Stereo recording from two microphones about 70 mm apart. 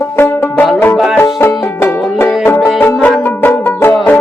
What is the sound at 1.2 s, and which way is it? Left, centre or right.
Music, left.